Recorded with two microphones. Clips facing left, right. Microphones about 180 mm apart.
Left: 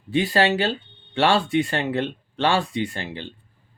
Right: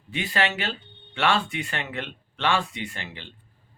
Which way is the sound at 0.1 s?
35° left (ahead or behind).